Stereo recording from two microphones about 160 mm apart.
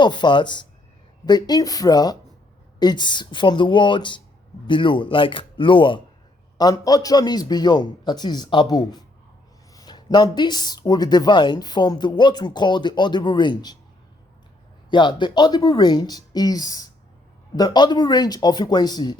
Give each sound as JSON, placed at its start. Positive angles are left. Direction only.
{"t": 0.0, "sound": "speech", "side_deg": 30}
{"t": 14.8, "sound": "speech", "side_deg": 30}